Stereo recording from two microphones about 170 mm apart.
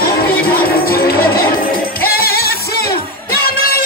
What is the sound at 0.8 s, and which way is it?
Music, 60° left (ahead or behind).